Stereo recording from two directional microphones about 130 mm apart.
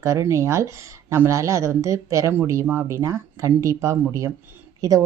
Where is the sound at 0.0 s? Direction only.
25° right (ahead or behind).